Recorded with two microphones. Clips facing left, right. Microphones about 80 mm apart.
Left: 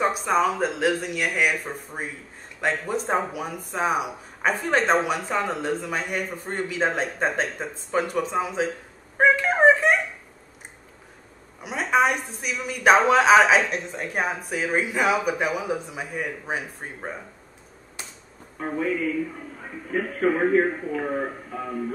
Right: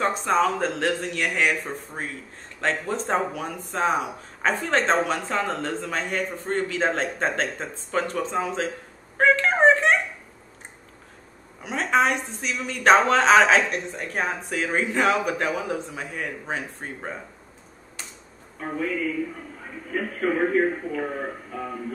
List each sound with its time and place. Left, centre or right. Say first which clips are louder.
0.0 s speech: even; centre
2.6 s speech: even; centre
9.2 s a sound: left 1 dB; centre
11.6 s speech: even; centre
18.6 s speech: left 2 dB; left